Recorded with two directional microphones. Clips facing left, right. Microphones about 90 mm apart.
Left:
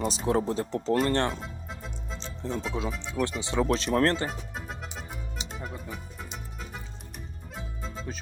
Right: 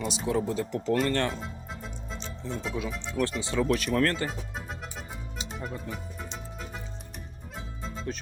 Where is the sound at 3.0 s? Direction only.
15° left (ahead or behind); by 4.3 s 30° left (ahead or behind).